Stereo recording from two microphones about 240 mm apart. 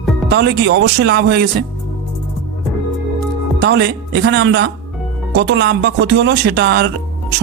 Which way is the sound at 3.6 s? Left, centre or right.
Right.